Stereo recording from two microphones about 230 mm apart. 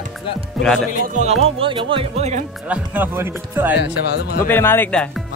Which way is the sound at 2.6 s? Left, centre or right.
Centre.